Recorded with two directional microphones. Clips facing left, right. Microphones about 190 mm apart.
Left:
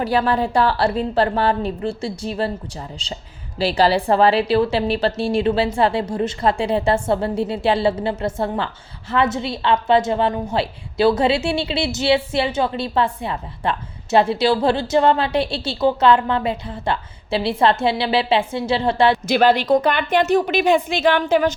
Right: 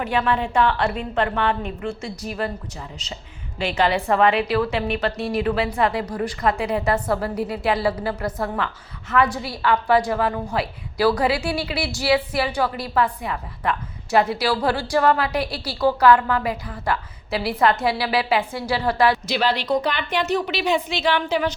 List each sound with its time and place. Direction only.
0.0 s a woman's voice: 35° left (ahead or behind)
19.3 s a woman's voice: 50° left (ahead or behind)